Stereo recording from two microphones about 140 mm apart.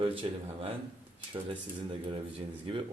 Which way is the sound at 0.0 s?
40° right (ahead or behind).